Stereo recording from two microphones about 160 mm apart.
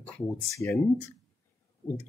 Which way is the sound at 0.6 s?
20° left (ahead or behind).